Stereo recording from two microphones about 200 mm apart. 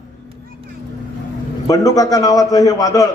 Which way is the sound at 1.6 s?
15° left (ahead or behind).